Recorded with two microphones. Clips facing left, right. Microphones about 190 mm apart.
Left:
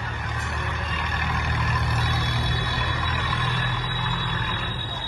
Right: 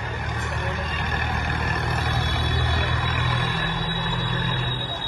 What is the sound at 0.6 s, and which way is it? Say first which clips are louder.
Vehicle: right 3 dB; 45° right (ahead or behind).